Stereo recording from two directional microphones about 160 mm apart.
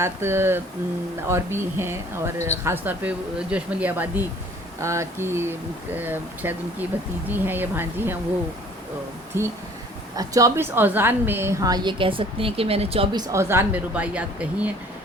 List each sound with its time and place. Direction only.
0.0 s speech: 15° right (ahead or behind)
9.3 s a woman's voice: 15° right (ahead or behind); by 13.1 s 40° right (ahead or behind)
13.1 s speech: 20° right (ahead or behind)